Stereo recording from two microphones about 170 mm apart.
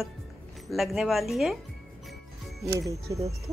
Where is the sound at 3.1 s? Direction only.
25° right (ahead or behind).